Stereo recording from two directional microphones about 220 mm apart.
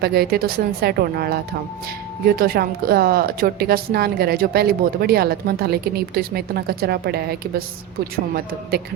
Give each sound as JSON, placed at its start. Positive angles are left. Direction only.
{"t": 0.0, "sound": "a woman's voice", "side_deg": -45}